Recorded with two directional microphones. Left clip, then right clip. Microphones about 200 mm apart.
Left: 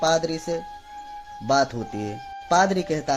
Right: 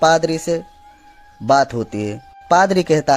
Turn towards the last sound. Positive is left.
turn(degrees=-45)  # may be behind; listen again after turning